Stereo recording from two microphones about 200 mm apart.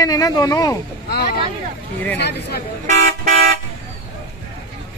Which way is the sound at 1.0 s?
50° left (ahead or behind).